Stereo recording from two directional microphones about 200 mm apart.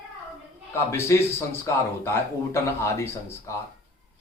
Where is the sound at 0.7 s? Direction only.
15° left (ahead or behind).